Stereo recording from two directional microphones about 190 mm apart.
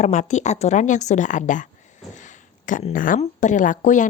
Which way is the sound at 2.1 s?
40° left (ahead or behind).